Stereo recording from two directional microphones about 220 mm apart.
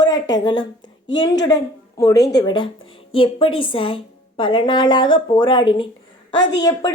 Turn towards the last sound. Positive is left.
turn(degrees=15)  # may be behind; listen again after turning